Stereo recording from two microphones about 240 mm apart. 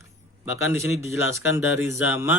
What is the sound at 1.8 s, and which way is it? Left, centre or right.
Speech, centre.